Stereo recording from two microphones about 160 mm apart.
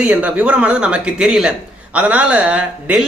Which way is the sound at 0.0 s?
10° right (ahead or behind).